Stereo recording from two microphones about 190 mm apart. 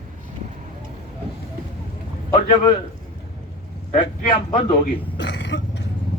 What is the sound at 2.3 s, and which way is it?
Speech, 25° left (ahead or behind).